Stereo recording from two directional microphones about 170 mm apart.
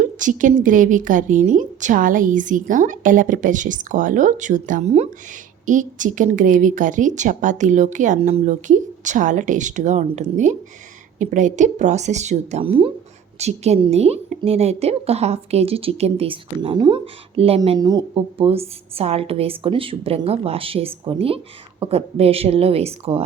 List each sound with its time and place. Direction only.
0.0 s a woman's voice: 50° right (ahead or behind)
17.7 s a woman's voice: 25° right (ahead or behind)